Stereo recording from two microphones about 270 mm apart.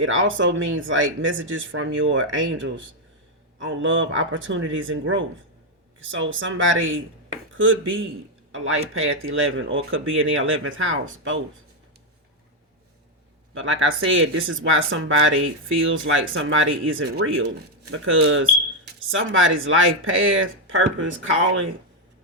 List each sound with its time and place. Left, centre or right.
0.0 s speech: right
13.5 s speech: right